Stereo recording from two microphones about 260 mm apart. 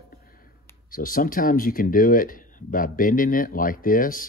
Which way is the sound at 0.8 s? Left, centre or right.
Left.